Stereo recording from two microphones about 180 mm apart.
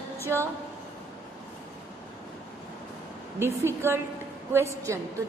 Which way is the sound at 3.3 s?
15° right (ahead or behind).